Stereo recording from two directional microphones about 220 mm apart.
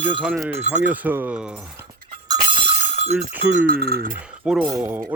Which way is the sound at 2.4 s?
25° right (ahead or behind).